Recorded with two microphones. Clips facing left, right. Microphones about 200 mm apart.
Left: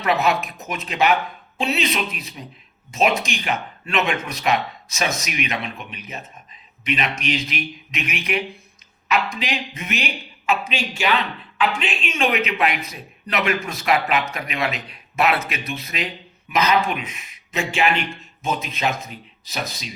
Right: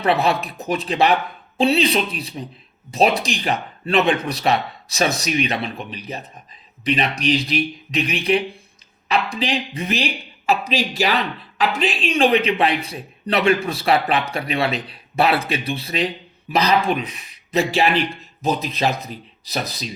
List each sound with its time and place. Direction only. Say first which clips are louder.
0.0 s speech: right 2 dB; 30° right (ahead or behind)